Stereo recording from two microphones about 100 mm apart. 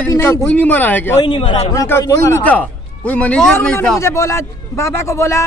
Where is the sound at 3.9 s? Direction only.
30° left (ahead or behind).